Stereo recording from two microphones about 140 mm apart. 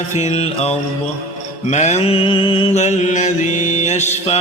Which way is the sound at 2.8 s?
60° left (ahead or behind).